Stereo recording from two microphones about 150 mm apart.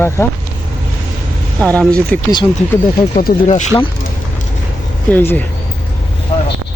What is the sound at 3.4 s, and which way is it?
Speech, 50° left (ahead or behind).